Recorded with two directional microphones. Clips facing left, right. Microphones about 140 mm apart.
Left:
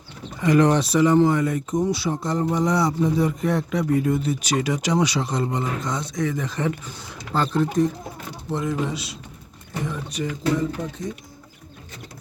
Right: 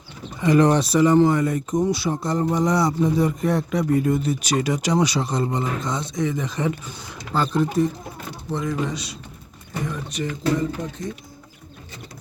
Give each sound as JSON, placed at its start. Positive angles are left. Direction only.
{"t": 0.4, "sound": "speech", "side_deg": -30}
{"t": 8.4, "sound": "speech", "side_deg": 5}